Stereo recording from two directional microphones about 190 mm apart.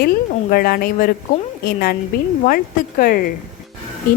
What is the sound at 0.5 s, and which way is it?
A woman's voice, 50° left (ahead or behind).